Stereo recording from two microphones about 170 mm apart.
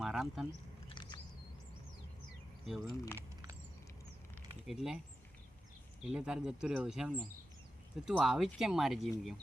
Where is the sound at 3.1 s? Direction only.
20° right (ahead or behind).